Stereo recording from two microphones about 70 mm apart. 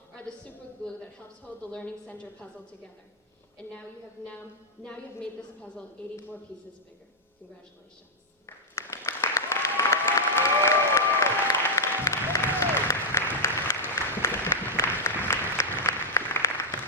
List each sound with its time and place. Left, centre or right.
1.7 s a woman's voice: centre
5.4 s a woman's voice: centre
8.4 s applause: left